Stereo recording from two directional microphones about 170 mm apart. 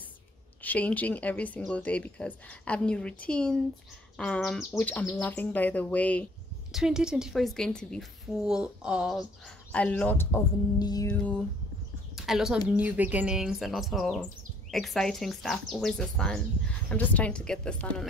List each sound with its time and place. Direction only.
0.6 s speech: 10° left (ahead or behind)
6.7 s a woman's voice: 5° right (ahead or behind)
9.7 s speech: 5° left (ahead or behind)
10.8 s music: 20° left (ahead or behind)
11.1 s music: 10° left (ahead or behind)
12.2 s a woman's voice: centre (ahead or behind)